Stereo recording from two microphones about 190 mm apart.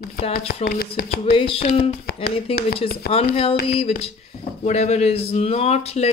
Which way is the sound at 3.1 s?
55° left (ahead or behind).